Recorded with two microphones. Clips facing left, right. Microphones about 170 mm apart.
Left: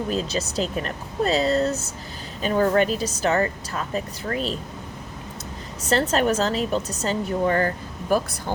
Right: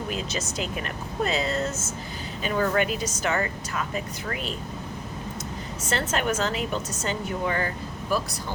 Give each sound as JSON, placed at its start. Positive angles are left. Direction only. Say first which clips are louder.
{"t": 0.1, "sound": "speech", "louder": "left 5 dB", "side_deg": 35}
{"t": 5.8, "sound": "speech", "louder": "left 6 dB", "side_deg": 35}